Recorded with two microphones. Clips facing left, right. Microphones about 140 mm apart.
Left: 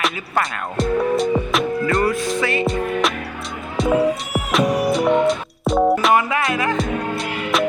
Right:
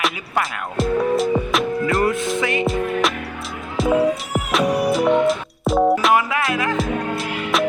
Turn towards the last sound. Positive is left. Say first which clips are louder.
# even
turn(degrees=0)  # may be behind; listen again after turning